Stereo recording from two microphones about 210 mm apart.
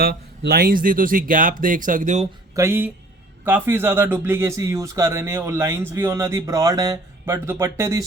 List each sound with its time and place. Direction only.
0.0 s speech: 45° right (ahead or behind)
2.6 s speech: 10° right (ahead or behind)